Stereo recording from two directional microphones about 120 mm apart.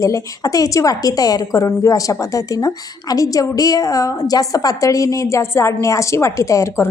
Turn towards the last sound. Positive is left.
turn(degrees=25)  # may be behind; listen again after turning